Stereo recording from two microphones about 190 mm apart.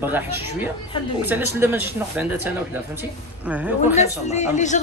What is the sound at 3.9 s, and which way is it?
Speech, 35° left (ahead or behind).